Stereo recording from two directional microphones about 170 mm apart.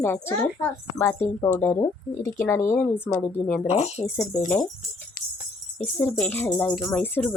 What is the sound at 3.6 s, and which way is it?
Speech, 35° left (ahead or behind).